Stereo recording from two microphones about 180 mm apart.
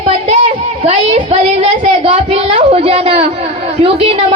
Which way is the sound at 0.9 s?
35° right (ahead or behind).